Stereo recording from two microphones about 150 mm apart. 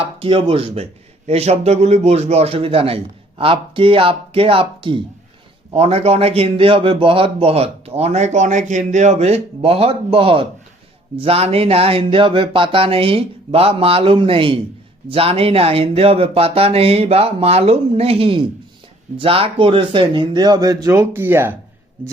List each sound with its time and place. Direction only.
0.0 s a man's voice: 35° right (ahead or behind); by 21.5 s 15° right (ahead or behind)